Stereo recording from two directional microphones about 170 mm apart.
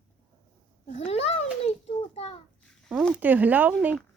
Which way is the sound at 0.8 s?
40° left (ahead or behind).